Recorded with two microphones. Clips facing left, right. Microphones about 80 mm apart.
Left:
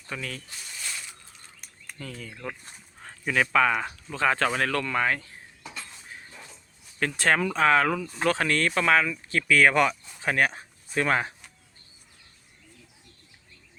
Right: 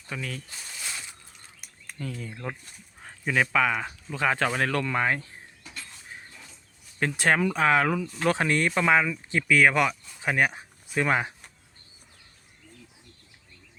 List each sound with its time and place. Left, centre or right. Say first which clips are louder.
0.1 s speech: even; centre
1.6 s a sound: right 4 dB; centre
2.3 s speech: right 1 dB; centre
7.0 s speech: right 1 dB; centre